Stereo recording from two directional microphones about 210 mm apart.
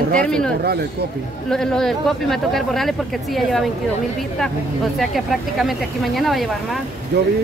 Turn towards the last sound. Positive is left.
turn(degrees=-50)  # may be behind; listen again after turning